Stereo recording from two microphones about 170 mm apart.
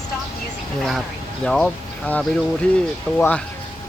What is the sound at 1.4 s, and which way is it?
Speech, 5° left (ahead or behind).